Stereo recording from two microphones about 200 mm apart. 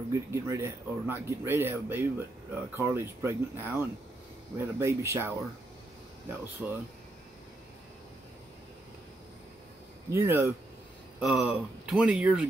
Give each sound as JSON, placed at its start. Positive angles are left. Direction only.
{"t": 0.1, "sound": "speech", "side_deg": -15}
{"t": 6.4, "sound": "speech", "side_deg": -10}
{"t": 10.0, "sound": "speech", "side_deg": -15}